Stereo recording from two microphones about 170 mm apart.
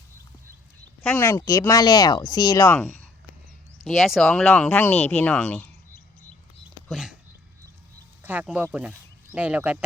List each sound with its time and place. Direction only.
1.0 s speech: 10° left (ahead or behind)
3.8 s speech: centre (ahead or behind)
6.8 s a sound: centre (ahead or behind)
8.2 s speech: 10° right (ahead or behind)